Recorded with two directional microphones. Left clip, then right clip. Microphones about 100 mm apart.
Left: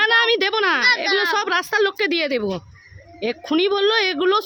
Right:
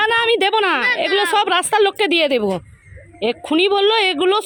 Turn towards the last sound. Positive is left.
turn(degrees=0)  # may be behind; listen again after turning